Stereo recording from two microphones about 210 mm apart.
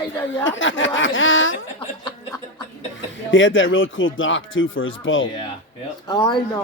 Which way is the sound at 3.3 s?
65° left (ahead or behind).